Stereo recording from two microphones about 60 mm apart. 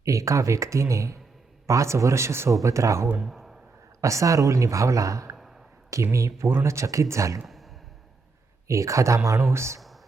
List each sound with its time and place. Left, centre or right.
0.0 s speech: right
2.6 s speech: right
3.2 s a man's voice: centre
4.0 s speech: right
5.4 s a sound: centre
5.9 s speech: right
7.4 s a sound: centre
8.6 s speech: right